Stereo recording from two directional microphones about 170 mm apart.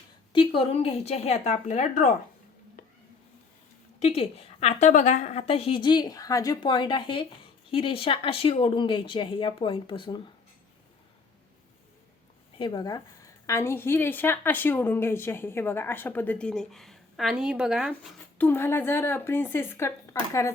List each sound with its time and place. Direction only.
0.3 s a woman's voice: 35° left (ahead or behind)
4.0 s a woman's voice: 35° left (ahead or behind)
12.5 s a woman's voice: 25° left (ahead or behind); by 18.1 s 5° right (ahead or behind)
18.3 s a woman's voice: 15° left (ahead or behind)